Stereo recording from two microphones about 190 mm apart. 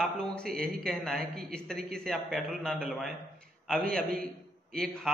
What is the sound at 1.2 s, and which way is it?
Speech, 55° right (ahead or behind).